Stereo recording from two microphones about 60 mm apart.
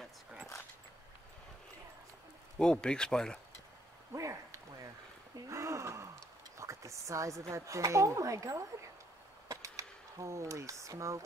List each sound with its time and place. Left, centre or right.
2.6 s speech: centre
4.1 s a sound: right
5.5 s gasp: right
6.5 s a woman's voice: right